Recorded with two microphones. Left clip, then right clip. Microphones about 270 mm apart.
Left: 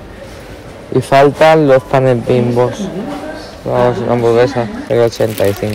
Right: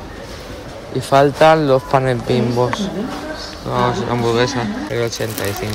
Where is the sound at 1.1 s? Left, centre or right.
Centre.